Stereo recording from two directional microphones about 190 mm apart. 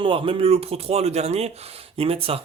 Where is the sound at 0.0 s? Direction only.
30° right (ahead or behind).